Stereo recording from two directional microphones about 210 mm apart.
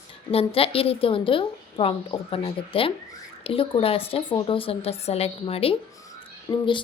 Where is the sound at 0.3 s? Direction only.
25° left (ahead or behind).